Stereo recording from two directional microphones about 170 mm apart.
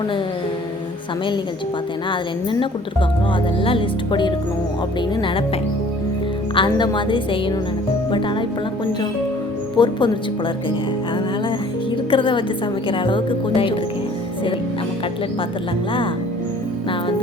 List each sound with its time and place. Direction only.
2.0 s a woman's voice: 30° left (ahead or behind)
6.5 s a woman's voice: 30° left (ahead or behind)
9.7 s a woman's voice: 25° left (ahead or behind)
12.1 s a woman's voice: 30° left (ahead or behind)